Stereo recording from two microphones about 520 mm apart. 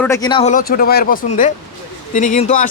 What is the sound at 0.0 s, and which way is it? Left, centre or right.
Speech, centre.